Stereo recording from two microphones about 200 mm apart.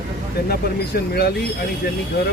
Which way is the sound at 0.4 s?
50° left (ahead or behind).